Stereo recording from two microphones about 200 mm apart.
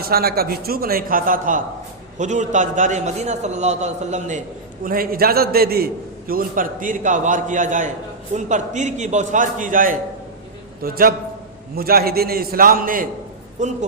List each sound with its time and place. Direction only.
0.0 s a man's voice: 50° right (ahead or behind)